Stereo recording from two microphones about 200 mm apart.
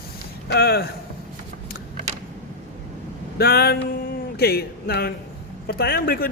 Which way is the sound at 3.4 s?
50° left (ahead or behind).